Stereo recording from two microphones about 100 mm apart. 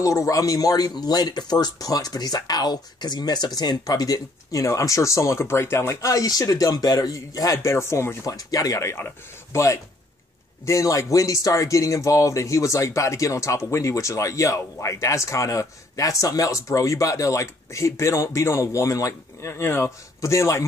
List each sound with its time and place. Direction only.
0.0 s speech: 35° left (ahead or behind)